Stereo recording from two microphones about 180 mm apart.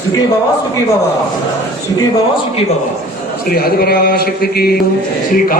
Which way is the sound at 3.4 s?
55° left (ahead or behind).